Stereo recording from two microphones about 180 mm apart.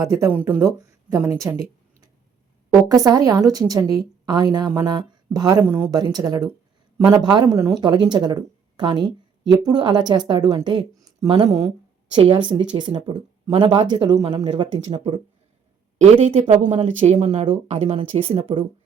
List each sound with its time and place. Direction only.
0.0 s speech: 15° right (ahead or behind)
2.6 s speech: 20° right (ahead or behind)
11.0 s a sound: 25° right (ahead or behind)
12.2 s speech: 25° right (ahead or behind)
16.1 s speech: 35° right (ahead or behind)